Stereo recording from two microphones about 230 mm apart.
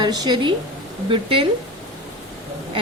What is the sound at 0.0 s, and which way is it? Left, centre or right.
A woman's voice, centre.